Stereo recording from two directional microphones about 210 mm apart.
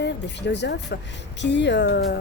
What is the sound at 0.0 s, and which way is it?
Speech, 55° left (ahead or behind).